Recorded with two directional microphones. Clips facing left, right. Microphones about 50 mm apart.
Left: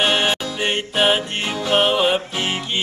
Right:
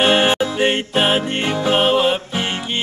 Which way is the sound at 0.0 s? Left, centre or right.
Centre.